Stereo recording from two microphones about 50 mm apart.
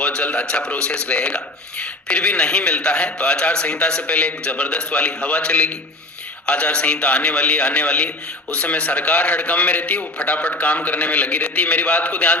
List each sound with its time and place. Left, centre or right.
0.0 s a man's voice: left